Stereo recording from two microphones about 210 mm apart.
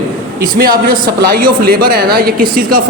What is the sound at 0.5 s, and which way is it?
A man's voice, 45° right (ahead or behind).